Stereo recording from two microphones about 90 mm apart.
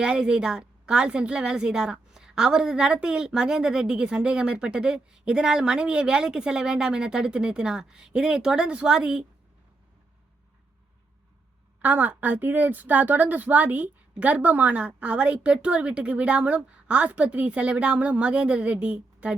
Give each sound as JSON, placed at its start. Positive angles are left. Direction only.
{"t": 0.0, "sound": "a woman's voice", "side_deg": -10}
{"t": 11.8, "sound": "a woman's voice", "side_deg": -20}